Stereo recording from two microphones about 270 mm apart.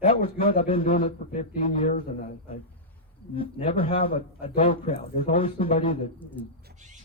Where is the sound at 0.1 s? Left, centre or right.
Left.